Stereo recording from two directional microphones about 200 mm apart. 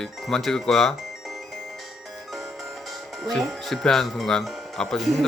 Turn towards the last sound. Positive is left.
turn(degrees=0)  # may be behind; listen again after turning